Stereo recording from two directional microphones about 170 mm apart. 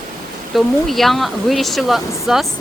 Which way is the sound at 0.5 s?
Centre (ahead or behind).